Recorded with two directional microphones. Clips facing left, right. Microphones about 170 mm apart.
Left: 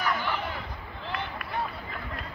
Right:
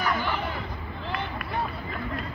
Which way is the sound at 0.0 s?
Centre (ahead or behind).